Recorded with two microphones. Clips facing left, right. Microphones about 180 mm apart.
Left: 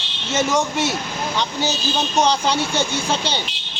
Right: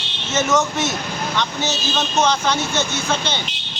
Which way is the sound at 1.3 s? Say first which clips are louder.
Left 1 dB; 35° left (ahead or behind).